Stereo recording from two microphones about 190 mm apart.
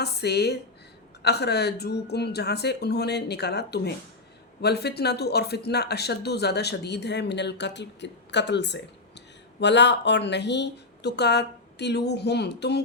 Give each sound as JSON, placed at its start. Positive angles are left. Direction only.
{"t": 0.0, "sound": "speech", "side_deg": 60}